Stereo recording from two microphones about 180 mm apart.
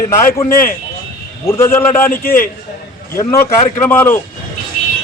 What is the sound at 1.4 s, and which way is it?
Speech, 15° left (ahead or behind).